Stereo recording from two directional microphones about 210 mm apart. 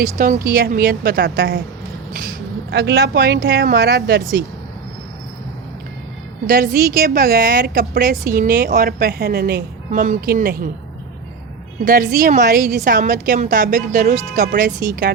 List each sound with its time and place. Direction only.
0.4 s a woman's voice: 45° right (ahead or behind)
6.5 s a woman's voice: 45° right (ahead or behind)
11.8 s a woman's voice: 45° right (ahead or behind)